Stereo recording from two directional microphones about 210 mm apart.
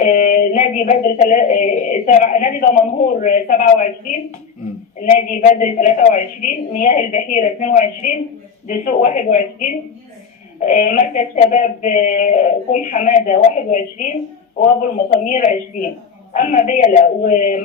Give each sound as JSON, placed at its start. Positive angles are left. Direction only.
{"t": 0.0, "sound": "speech", "side_deg": 40}
{"t": 4.9, "sound": "speech", "side_deg": 40}